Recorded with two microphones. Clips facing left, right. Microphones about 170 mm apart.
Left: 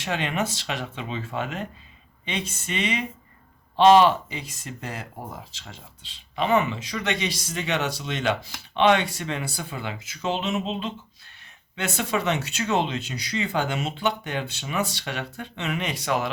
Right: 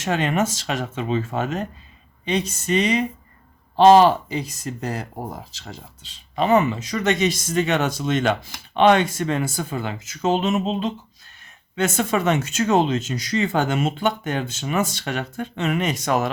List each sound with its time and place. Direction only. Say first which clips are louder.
0.0 s speech: right 5 dB; 45° right (ahead or behind)